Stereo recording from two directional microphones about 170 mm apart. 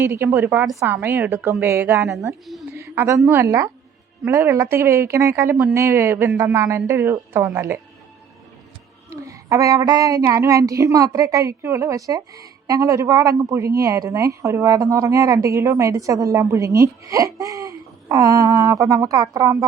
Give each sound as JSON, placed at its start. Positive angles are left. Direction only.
{"t": 0.0, "sound": "a man's voice", "side_deg": -15}
{"t": 2.7, "sound": "a sound", "side_deg": -15}
{"t": 3.2, "sound": "a woman's voice", "side_deg": -15}
{"t": 9.2, "sound": "a woman's voice", "side_deg": -20}